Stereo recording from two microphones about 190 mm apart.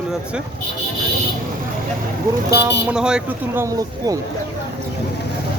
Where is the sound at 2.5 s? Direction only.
10° right (ahead or behind).